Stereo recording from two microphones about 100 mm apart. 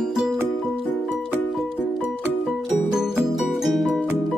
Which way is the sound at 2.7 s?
5° right (ahead or behind).